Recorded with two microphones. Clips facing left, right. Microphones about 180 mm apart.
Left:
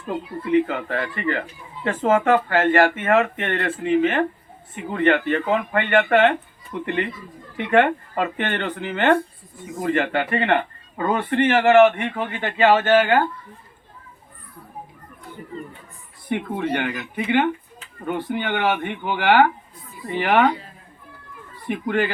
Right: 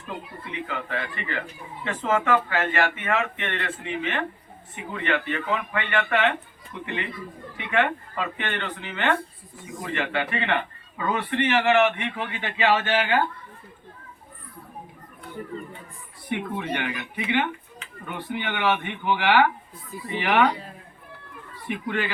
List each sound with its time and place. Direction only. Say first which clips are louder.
0.1 s a man's voice: left 15 dB; 50° left (ahead or behind)
16.6 s a man's voice: left 5 dB; 50° left (ahead or behind)
21.7 s a man's voice: left 6 dB; 45° left (ahead or behind)